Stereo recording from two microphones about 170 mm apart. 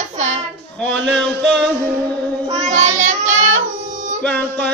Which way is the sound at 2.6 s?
45° right (ahead or behind).